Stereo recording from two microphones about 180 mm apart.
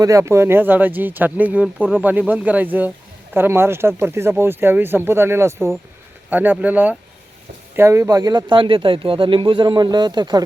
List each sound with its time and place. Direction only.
0.0 s speech: 15° right (ahead or behind)